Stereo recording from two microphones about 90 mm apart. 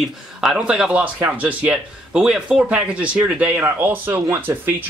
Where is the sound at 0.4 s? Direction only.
5° right (ahead or behind).